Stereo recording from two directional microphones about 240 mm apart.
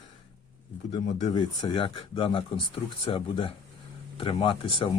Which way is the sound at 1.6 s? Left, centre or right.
Centre.